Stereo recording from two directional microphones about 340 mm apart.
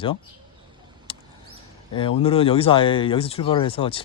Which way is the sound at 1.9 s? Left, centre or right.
Centre.